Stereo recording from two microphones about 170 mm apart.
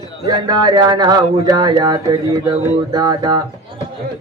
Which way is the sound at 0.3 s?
25° right (ahead or behind).